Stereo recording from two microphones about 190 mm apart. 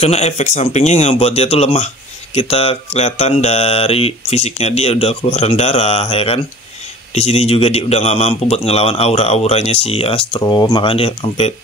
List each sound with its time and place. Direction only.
0.0 s a man's voice: 35° left (ahead or behind)